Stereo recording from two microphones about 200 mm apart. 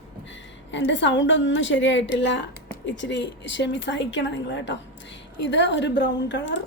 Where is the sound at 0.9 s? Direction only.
65° left (ahead or behind).